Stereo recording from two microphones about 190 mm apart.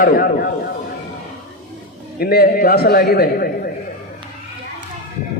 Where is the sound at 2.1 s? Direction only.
55° left (ahead or behind).